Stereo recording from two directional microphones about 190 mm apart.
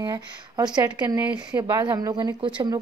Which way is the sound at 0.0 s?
20° right (ahead or behind).